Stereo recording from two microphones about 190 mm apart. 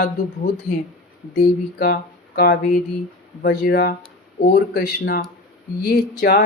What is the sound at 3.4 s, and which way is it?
Speech, 50° left (ahead or behind).